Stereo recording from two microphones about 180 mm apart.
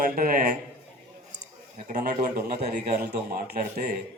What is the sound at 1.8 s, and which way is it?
Speech, 45° right (ahead or behind).